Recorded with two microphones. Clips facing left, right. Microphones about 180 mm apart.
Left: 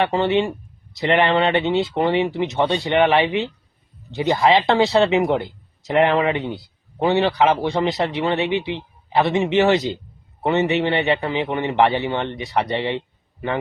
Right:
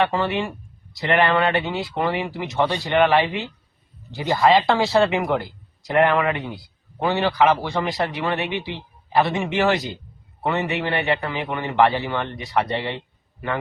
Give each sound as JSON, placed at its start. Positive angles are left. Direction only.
{"t": 0.0, "sound": "a man's voice", "side_deg": 20}